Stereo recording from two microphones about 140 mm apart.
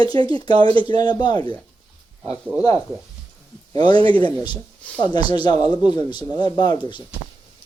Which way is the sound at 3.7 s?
30° left (ahead or behind).